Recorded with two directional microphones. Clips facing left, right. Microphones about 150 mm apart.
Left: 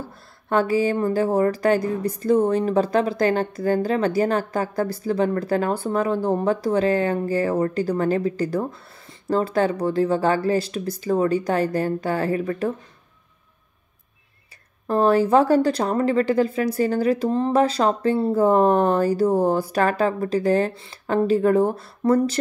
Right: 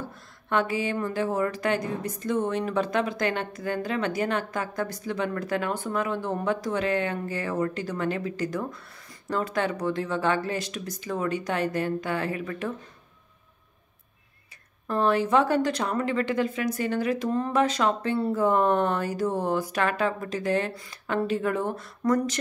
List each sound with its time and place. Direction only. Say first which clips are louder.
0.1 s speech: left 6 dB; 35° left (ahead or behind)
14.9 s speech: left 6 dB; 35° left (ahead or behind)